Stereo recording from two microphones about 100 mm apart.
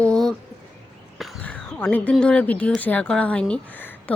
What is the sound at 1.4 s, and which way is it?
Speech, 15° left (ahead or behind).